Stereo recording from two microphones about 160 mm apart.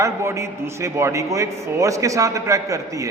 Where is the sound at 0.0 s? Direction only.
20° right (ahead or behind).